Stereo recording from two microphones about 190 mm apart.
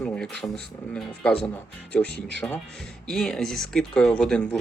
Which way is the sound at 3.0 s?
5° left (ahead or behind).